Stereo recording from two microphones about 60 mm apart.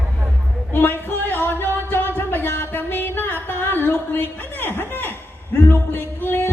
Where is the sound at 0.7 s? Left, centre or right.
Left.